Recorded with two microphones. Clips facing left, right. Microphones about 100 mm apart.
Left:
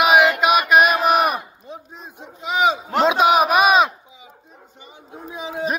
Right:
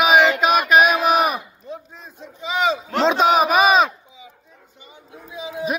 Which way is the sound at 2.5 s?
10° left (ahead or behind).